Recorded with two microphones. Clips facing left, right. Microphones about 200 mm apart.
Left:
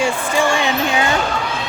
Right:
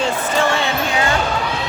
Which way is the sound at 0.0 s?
10° left (ahead or behind).